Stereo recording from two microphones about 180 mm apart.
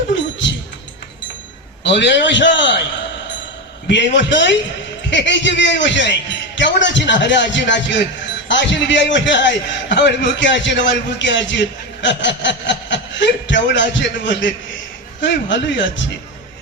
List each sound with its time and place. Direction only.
0.1 s a sound: 85° left
1.8 s a man's voice: 80° left
3.8 s a man's voice: 80° left